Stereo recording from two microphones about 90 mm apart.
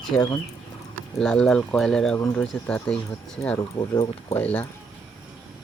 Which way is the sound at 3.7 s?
55° left (ahead or behind).